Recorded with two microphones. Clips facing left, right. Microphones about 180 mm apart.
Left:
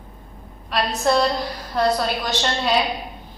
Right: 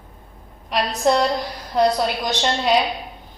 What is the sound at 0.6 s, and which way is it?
A woman's voice, 15° right (ahead or behind).